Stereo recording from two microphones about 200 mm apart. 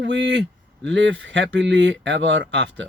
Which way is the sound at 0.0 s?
65° right (ahead or behind).